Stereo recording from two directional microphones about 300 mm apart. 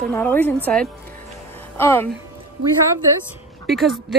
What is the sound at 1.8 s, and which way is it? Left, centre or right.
Speech, centre.